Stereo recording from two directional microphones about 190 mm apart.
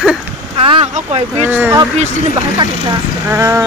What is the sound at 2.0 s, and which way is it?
Speech, 30° right (ahead or behind).